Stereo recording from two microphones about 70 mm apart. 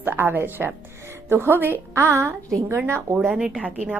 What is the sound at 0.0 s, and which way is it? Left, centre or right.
A woman's voice, right.